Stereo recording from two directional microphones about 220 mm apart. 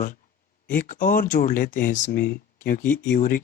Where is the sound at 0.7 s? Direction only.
40° left (ahead or behind).